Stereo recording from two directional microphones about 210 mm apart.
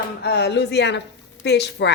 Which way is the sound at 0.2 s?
55° left (ahead or behind).